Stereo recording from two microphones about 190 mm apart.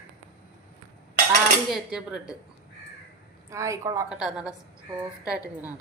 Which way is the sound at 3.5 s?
15° right (ahead or behind).